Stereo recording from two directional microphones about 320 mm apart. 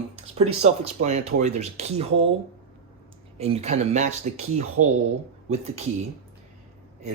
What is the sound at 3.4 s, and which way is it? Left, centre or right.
Speech, centre.